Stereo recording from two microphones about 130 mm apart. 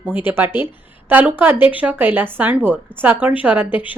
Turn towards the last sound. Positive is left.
turn(degrees=-15)  # may be behind; listen again after turning